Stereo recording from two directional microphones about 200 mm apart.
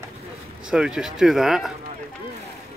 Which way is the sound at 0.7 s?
5° right (ahead or behind).